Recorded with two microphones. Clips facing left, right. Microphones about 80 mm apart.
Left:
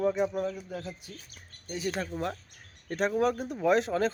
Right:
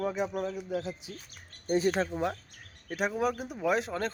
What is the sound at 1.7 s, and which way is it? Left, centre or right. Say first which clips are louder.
Speech: right 6 dB; right.